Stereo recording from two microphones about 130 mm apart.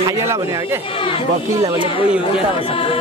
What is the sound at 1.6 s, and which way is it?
Speech, 30° right (ahead or behind).